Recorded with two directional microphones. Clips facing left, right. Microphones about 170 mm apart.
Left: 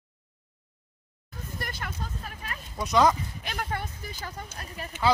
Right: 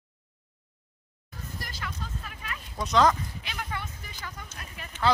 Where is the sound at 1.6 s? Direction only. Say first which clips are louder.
Left 3 dB; 55° left (ahead or behind).